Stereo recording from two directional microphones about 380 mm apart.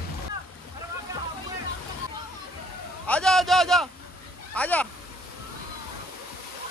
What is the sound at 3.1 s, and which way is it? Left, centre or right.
Speech, centre.